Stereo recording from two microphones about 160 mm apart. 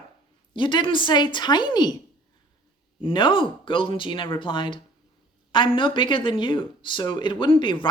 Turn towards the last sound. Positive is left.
turn(degrees=30)  # may be behind; listen again after turning